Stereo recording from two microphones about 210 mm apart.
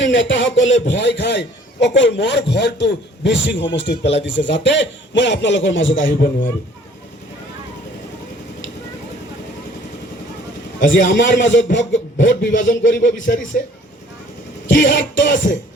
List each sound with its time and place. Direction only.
0.0 s a man's voice: 60° left (ahead or behind)
11.1 s a man's voice: 60° left (ahead or behind)
14.7 s a man's voice: 60° left (ahead or behind)